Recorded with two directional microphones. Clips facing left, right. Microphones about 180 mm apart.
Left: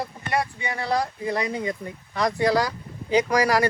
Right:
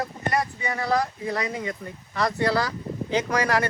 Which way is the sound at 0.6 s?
30° left (ahead or behind).